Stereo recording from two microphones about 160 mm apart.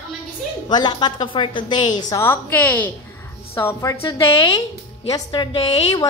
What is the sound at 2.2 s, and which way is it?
A woman's voice, 10° left (ahead or behind).